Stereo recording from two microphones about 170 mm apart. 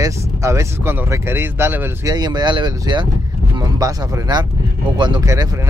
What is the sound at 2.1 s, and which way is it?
Speech, 25° right (ahead or behind).